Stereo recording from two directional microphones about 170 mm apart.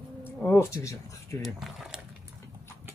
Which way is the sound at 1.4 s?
Centre (ahead or behind).